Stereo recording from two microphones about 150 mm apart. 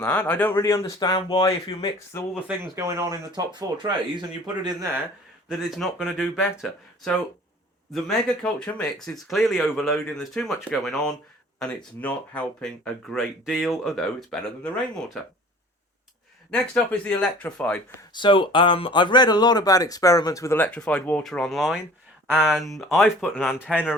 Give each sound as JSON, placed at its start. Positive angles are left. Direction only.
{"t": 0.0, "sound": "speech", "side_deg": 10}
{"t": 0.8, "sound": "speech", "side_deg": 30}
{"t": 2.6, "sound": "speech", "side_deg": -20}
{"t": 5.5, "sound": "speech", "side_deg": 0}
{"t": 16.5, "sound": "speech", "side_deg": 10}
{"t": 18.1, "sound": "speech", "side_deg": 35}